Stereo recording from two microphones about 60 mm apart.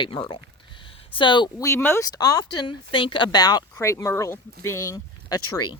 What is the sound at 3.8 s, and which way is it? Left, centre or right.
Speech, left.